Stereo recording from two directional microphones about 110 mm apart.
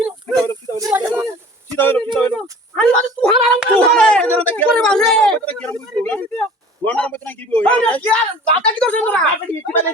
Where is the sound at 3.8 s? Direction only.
10° left (ahead or behind).